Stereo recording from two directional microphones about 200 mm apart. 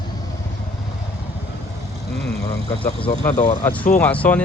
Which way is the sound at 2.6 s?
25° left (ahead or behind).